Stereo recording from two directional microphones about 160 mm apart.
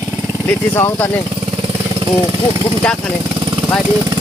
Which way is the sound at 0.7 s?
15° left (ahead or behind).